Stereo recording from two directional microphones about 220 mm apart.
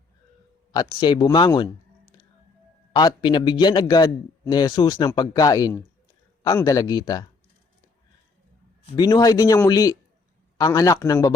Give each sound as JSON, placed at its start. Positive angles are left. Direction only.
{"t": 0.7, "sound": "a man's voice", "side_deg": 15}
{"t": 2.9, "sound": "a man's voice", "side_deg": 20}
{"t": 9.0, "sound": "speech", "side_deg": 20}